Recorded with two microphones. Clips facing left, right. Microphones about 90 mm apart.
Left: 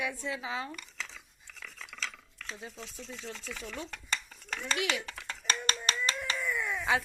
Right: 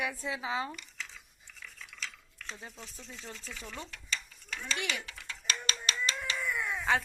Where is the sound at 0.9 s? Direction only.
90° left.